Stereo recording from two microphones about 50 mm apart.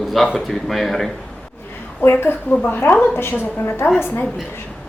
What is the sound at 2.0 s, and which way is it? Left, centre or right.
A woman's voice, left.